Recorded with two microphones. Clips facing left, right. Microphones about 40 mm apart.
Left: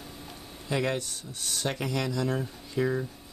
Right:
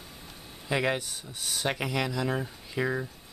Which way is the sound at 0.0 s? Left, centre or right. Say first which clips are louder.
Left 3 dB; centre.